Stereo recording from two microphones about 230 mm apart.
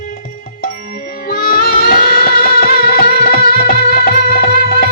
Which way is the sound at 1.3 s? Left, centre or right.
Left.